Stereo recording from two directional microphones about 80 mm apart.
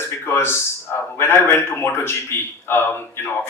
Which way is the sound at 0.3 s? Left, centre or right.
Left.